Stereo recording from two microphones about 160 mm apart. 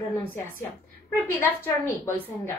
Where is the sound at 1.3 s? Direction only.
15° left (ahead or behind).